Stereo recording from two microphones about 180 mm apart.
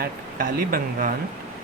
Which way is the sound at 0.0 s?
55° right (ahead or behind).